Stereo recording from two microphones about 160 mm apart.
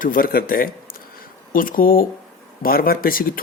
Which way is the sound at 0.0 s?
60° left (ahead or behind).